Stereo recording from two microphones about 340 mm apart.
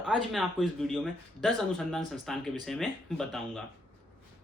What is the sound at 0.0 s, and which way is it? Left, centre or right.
Speech, centre.